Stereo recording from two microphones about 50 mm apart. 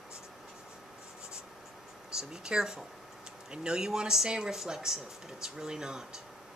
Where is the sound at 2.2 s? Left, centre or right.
Centre.